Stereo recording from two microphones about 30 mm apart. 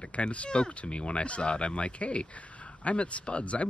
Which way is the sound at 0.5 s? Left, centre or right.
Left.